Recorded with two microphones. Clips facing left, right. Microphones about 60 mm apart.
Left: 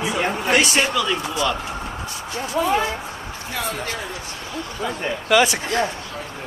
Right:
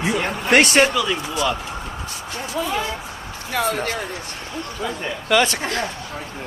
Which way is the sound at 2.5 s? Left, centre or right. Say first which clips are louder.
Left 5 dB; left.